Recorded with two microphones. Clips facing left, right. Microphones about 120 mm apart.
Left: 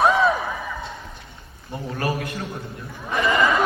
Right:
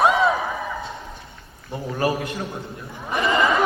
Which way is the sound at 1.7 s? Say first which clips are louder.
Right 3 dB; 20° right (ahead or behind).